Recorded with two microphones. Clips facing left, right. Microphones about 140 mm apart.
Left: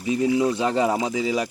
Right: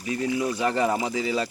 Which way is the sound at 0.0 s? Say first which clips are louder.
Left 5 dB; 20° left (ahead or behind).